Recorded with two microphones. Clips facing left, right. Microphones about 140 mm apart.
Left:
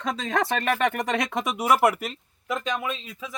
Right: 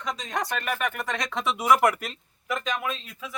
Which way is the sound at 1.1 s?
50° left (ahead or behind).